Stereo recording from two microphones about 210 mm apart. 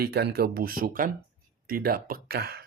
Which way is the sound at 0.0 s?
50° right (ahead or behind).